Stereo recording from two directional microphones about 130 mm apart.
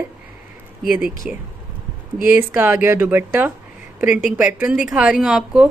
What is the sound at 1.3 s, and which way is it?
Speech, 10° right (ahead or behind).